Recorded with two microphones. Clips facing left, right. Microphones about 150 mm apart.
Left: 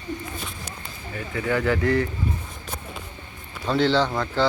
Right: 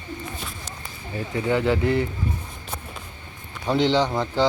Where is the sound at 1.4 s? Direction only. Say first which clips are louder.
Right 1 dB; 20° right (ahead or behind).